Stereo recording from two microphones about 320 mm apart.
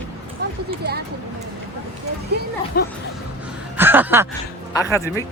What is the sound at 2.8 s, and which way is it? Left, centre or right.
Speech, left.